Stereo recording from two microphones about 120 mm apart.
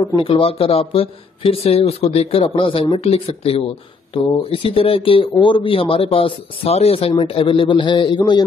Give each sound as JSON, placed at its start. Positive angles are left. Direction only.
{"t": 0.2, "sound": "speech", "side_deg": 50}